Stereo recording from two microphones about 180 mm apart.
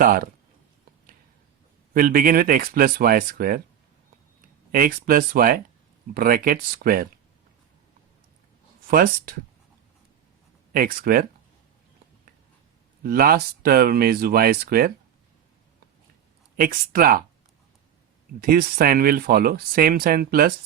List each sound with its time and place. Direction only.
0.0 s speech: 55° right (ahead or behind)
1.9 s speech: 50° right (ahead or behind)
4.7 s speech: 50° right (ahead or behind)
8.9 s speech: 55° right (ahead or behind)
10.7 s speech: 55° right (ahead or behind)
13.0 s speech: 55° right (ahead or behind)
16.6 s speech: 55° right (ahead or behind)
18.3 s speech: 55° right (ahead or behind)